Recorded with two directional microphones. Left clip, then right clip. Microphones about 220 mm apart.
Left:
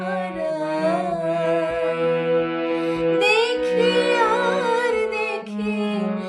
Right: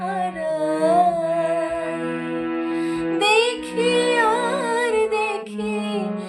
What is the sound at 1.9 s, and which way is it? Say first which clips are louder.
Music: left 6 dB; 40° left (ahead or behind).